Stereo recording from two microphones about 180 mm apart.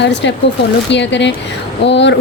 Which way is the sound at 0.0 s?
75° left (ahead or behind).